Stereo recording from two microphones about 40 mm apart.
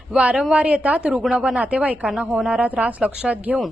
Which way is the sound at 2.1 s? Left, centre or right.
Right.